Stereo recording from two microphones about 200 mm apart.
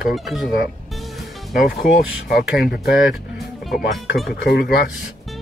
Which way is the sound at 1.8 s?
50° left (ahead or behind).